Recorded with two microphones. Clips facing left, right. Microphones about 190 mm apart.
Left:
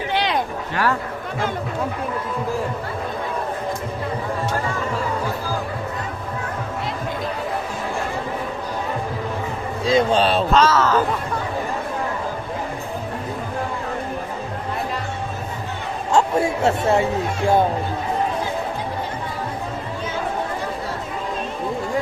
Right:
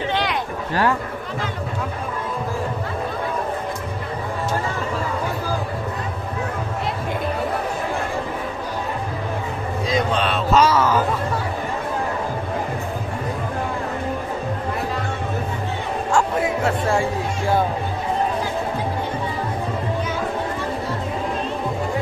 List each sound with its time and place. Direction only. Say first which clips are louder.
9.8 s a man's voice: left 5 dB; 30° left (ahead or behind)
10.5 s speech: right 3 dB; 10° right (ahead or behind)
16.1 s speech: left 3 dB; 25° left (ahead or behind)